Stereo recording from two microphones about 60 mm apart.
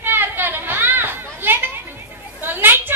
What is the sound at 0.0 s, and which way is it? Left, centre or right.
Chatter, right.